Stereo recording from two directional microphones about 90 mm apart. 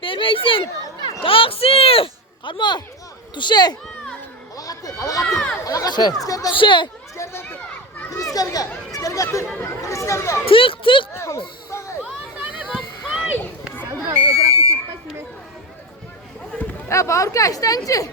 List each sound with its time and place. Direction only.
0.0 s a child's voice: 75° left (ahead or behind)
1.2 s speech: 90° left; by 3.8 s 50° left (ahead or behind)
4.5 s a sound: 40° left (ahead or behind)
5.3 s speech: 5° left (ahead or behind)
5.6 s speech: 40° left (ahead or behind)
6.5 s speech: 65° left (ahead or behind)
7.2 s speech: 35° left (ahead or behind)
10.4 s speech: 85° left
11.1 s speech: 35° left (ahead or behind)
12.5 s a sound: 15° right (ahead or behind)
14.1 s buzzer: 35° right (ahead or behind)
16.9 s speech: 35° left (ahead or behind)